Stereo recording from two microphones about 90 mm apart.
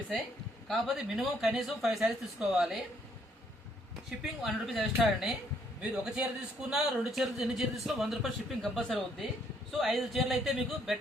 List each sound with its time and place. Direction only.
0.7 s a man's voice: centre (ahead or behind)
4.2 s a man's voice: centre (ahead or behind)
5.8 s a man's voice: 10° right (ahead or behind)